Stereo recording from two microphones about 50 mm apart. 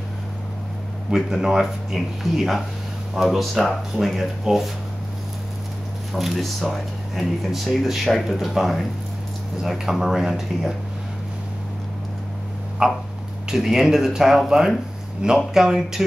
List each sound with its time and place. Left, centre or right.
1.1 s speech: centre
6.1 s speech: centre
12.8 s speech: centre